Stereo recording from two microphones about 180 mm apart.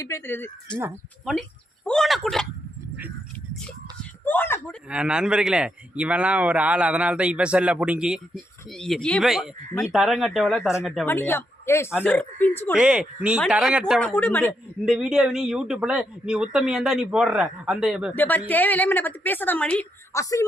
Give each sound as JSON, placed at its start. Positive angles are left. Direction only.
{"t": 0.0, "sound": "a woman's voice", "side_deg": 15}
{"t": 1.2, "sound": "speech", "side_deg": 0}
{"t": 4.3, "sound": "a woman's voice", "side_deg": 10}
{"t": 4.9, "sound": "a man's voice", "side_deg": -5}
{"t": 11.0, "sound": "a woman's voice", "side_deg": 10}
{"t": 12.7, "sound": "a man's voice", "side_deg": -5}
{"t": 14.0, "sound": "a woman's voice", "side_deg": 10}
{"t": 14.8, "sound": "a man's voice", "side_deg": -5}
{"t": 18.1, "sound": "a woman's voice", "side_deg": 10}